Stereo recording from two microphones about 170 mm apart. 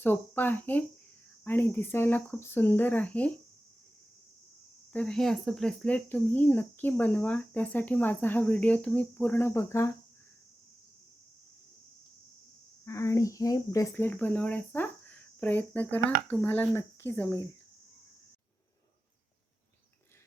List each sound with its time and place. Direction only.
0.0 s speech: 10° left (ahead or behind)
4.9 s speech: 5° left (ahead or behind)
12.8 s speech: 15° left (ahead or behind)